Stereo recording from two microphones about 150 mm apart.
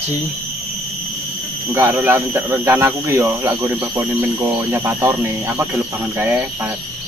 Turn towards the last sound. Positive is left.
turn(degrees=-15)  # may be behind; listen again after turning